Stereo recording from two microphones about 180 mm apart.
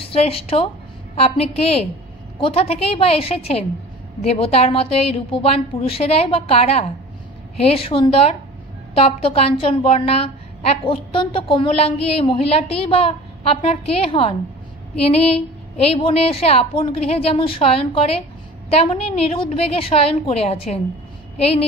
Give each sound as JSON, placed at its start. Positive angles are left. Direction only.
{"t": 0.0, "sound": "a woman's voice", "side_deg": 30}
{"t": 15.9, "sound": "a woman's voice", "side_deg": 35}